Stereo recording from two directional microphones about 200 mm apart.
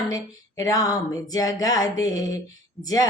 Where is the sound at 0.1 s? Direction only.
20° left (ahead or behind).